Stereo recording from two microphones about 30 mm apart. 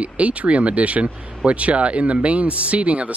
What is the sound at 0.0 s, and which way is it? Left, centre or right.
Speech, right.